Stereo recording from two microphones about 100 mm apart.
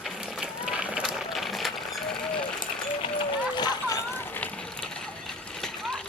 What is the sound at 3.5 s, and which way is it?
Splash, 45° left (ahead or behind).